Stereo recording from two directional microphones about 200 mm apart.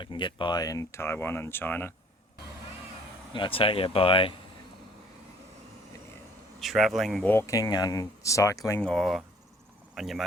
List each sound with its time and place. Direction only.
0.0 s speech: 25° left (ahead or behind)
3.3 s speech: 25° left (ahead or behind)
6.6 s speech: centre (ahead or behind); by 8.8 s 15° left (ahead or behind)
8.8 s speech: 5° left (ahead or behind)